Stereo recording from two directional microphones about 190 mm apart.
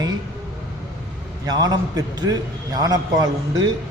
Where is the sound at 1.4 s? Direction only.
20° right (ahead or behind).